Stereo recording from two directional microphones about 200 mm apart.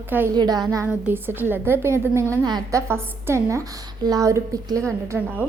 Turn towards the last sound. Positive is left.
turn(degrees=-15)  # may be behind; listen again after turning